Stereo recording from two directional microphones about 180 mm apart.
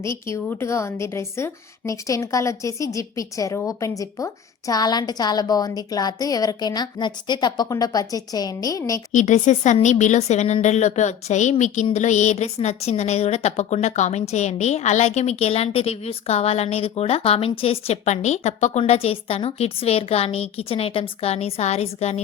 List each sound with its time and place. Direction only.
0.0 s a woman's voice: 15° left (ahead or behind)
9.1 s a woman's voice: 45° left (ahead or behind)